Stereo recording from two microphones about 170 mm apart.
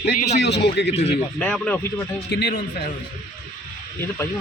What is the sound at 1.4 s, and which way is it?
Speech, 5° left (ahead or behind).